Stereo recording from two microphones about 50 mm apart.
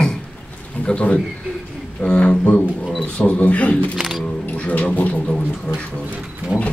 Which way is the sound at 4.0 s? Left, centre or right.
Centre.